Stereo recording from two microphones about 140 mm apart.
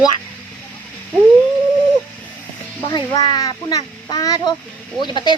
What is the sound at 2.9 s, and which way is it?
Speech, 30° left (ahead or behind).